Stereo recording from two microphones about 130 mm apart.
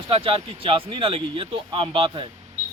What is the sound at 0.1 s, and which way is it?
Speech, 45° right (ahead or behind).